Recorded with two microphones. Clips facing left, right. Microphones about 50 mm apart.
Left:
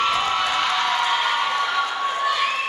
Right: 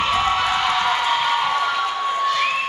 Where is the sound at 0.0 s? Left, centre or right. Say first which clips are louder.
Right 2 dB; centre.